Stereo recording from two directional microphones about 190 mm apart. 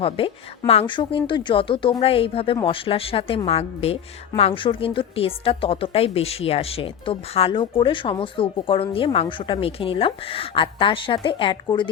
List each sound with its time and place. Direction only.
0.2 s a woman's voice: 30° left (ahead or behind)